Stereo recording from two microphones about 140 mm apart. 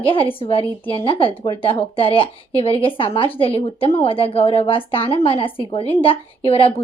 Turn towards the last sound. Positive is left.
turn(degrees=45)  # may be behind; listen again after turning